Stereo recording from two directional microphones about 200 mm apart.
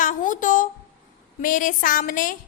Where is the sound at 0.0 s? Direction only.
40° left (ahead or behind).